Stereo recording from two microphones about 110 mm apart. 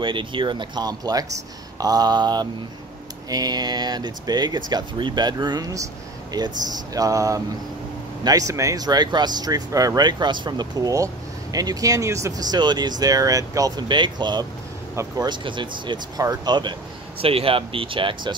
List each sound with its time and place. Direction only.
0.0 s speech: 50° right (ahead or behind)
16.2 s speech: 35° right (ahead or behind)
17.2 s speech: 60° right (ahead or behind)